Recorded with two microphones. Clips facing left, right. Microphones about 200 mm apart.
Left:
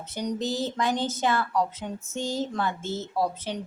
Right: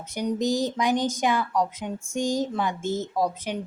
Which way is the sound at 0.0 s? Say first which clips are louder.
Right 4 dB; 10° right (ahead or behind).